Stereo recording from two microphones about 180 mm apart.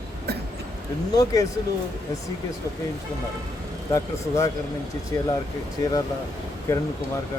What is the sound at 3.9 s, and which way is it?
Speech, 15° left (ahead or behind).